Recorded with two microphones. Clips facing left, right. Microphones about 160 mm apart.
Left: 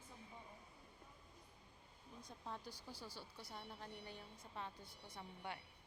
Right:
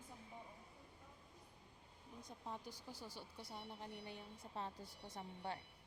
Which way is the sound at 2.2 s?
15° right (ahead or behind).